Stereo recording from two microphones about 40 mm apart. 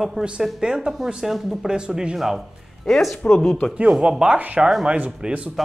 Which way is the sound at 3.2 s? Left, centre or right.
Left.